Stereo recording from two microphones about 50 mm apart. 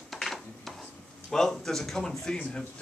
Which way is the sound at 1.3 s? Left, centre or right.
Centre.